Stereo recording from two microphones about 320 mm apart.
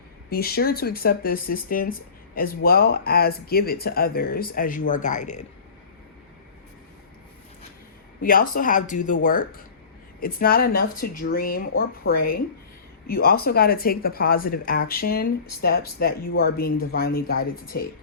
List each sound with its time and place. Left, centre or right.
0.3 s speech: left
8.2 s speech: left